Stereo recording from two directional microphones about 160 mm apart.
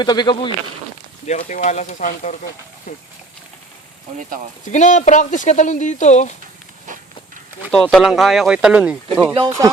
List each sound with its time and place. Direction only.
0.0 s speech: 25° left (ahead or behind)
1.3 s speech: 50° left (ahead or behind)
4.6 s speech: 50° left (ahead or behind)
7.7 s speech: 5° left (ahead or behind)